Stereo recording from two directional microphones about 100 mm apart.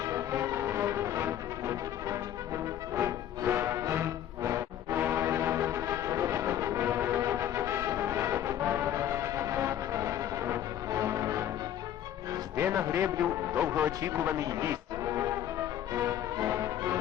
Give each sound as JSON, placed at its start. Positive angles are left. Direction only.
{"t": 0.0, "sound": "music", "side_deg": -30}
{"t": 12.5, "sound": "a man's voice", "side_deg": -25}
{"t": 15.9, "sound": "music", "side_deg": -30}